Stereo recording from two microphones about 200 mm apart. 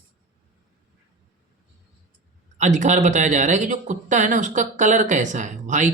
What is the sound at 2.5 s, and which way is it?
Speech, 35° right (ahead or behind).